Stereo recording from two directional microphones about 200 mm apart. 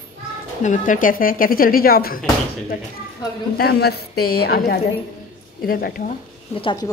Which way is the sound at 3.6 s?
55° left (ahead or behind).